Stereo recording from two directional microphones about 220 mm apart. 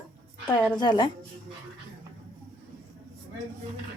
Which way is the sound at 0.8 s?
20° left (ahead or behind).